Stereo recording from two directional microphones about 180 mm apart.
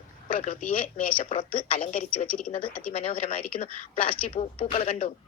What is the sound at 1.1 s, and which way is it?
Speech, 30° left (ahead or behind).